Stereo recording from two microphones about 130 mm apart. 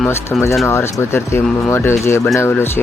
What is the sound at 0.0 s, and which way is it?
Speech, 15° left (ahead or behind).